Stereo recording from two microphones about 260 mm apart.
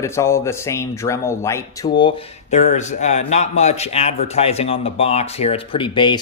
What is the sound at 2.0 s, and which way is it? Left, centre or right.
Speech, left.